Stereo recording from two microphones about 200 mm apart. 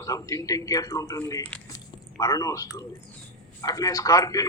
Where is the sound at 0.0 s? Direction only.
15° left (ahead or behind).